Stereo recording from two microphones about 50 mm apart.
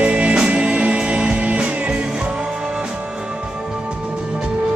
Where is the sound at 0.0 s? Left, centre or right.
Right.